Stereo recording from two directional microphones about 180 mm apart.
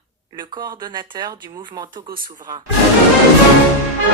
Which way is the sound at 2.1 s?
50° right (ahead or behind).